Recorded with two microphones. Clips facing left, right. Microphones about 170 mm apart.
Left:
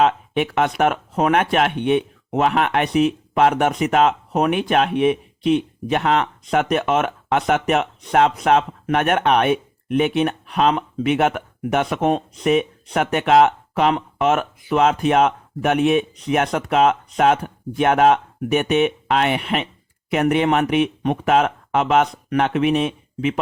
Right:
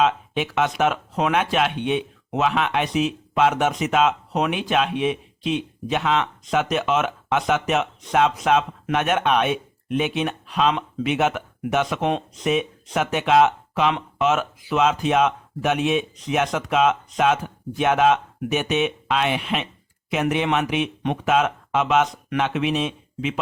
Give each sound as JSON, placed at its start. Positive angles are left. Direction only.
{"t": 0.0, "sound": "speech", "side_deg": 55}
{"t": 12.3, "sound": "speech", "side_deg": 60}